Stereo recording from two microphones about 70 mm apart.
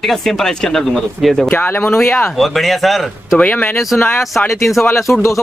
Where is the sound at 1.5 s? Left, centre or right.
Left.